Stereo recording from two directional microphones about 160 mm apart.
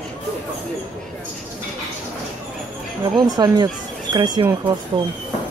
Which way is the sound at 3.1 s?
25° right (ahead or behind).